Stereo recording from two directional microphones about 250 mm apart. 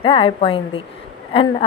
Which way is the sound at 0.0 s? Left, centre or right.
Left.